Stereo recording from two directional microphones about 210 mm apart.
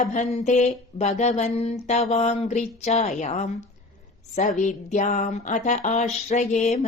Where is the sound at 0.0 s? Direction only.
35° left (ahead or behind).